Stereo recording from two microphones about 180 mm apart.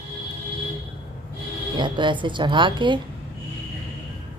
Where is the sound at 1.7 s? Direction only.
25° right (ahead or behind).